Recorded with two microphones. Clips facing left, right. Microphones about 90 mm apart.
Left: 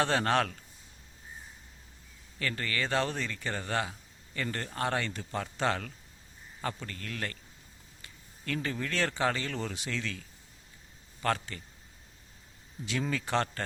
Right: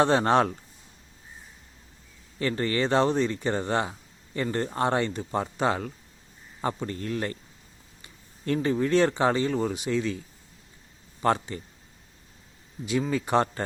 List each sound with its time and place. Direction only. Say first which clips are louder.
0.0 s speech: right 7 dB; 25° right (ahead or behind)
2.4 s speech: right 8 dB; 25° right (ahead or behind)
12.8 s speech: right 6 dB; 15° right (ahead or behind)